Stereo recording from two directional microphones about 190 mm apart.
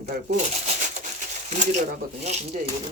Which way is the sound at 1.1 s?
40° right (ahead or behind).